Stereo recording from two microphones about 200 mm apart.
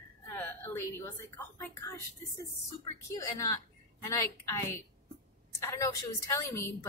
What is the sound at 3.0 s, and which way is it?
A woman's voice, 15° left (ahead or behind).